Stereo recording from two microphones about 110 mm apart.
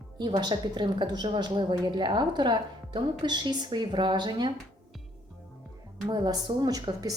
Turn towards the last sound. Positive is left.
turn(degrees=-35)  # may be behind; listen again after turning